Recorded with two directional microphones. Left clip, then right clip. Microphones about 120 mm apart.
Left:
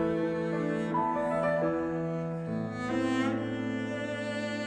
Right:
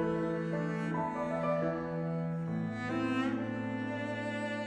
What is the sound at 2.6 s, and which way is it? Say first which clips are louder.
Music: left 3 dB; 40° left (ahead or behind).